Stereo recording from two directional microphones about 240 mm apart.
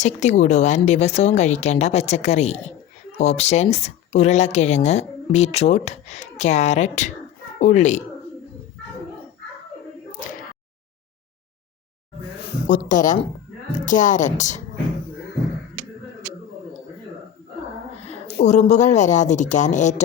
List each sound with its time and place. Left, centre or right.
0.0 s a woman's voice: left
12.6 s a woman's voice: left
18.4 s speech: left